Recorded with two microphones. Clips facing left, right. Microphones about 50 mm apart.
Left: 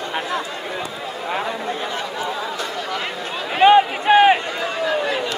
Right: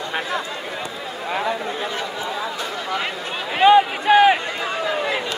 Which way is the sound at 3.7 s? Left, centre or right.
Left.